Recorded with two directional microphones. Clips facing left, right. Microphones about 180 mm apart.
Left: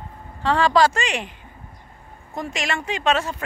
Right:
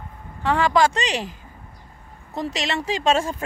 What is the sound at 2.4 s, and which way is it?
Speech, 30° right (ahead or behind).